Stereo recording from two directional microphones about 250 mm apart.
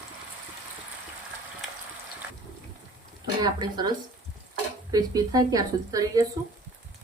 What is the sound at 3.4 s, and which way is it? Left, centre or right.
Speech, centre.